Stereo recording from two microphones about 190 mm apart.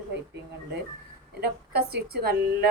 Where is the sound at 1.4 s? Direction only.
55° right (ahead or behind).